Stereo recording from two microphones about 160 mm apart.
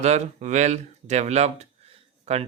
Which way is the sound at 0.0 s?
45° right (ahead or behind).